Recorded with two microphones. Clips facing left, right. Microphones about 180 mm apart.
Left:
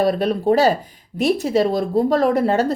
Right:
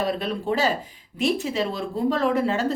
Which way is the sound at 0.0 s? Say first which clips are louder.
Left 8 dB; 40° left (ahead or behind).